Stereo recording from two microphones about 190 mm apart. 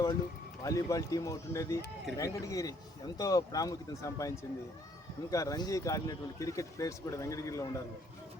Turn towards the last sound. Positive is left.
turn(degrees=15)  # may be behind; listen again after turning